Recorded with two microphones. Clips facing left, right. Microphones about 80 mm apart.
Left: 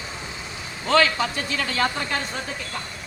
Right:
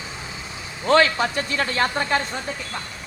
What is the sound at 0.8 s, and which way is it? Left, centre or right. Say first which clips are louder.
Speech: right 2 dB; right.